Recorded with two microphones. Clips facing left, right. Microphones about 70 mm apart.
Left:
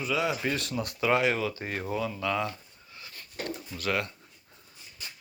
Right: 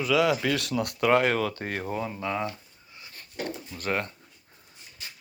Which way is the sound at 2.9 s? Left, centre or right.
Right.